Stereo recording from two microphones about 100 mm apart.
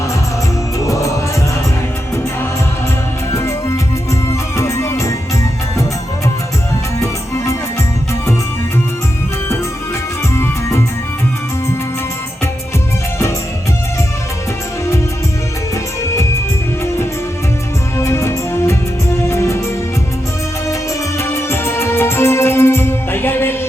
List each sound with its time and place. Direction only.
0.9 s music: 30° left (ahead or behind)
3.3 s music: 30° left (ahead or behind)
7.0 s music: 30° left (ahead or behind)
10.3 s music: 25° left (ahead or behind)
17.9 s music: 30° left (ahead or behind)
21.2 s music: 25° left (ahead or behind)